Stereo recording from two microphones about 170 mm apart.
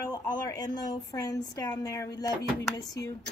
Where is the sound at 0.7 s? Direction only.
20° left (ahead or behind).